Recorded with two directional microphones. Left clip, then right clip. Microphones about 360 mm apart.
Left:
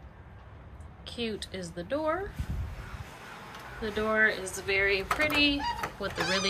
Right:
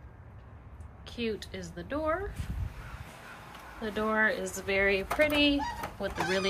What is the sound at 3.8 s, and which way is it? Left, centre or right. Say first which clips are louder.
Speech: left 2 dB; centre.